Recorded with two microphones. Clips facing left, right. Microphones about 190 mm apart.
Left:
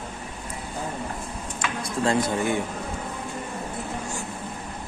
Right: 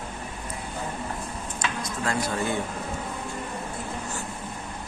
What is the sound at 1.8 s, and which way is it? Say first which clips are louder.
Speech: left 7 dB; 25° left (ahead or behind).